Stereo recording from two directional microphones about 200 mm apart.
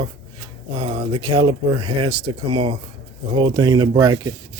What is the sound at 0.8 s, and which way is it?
Speech, 25° right (ahead or behind).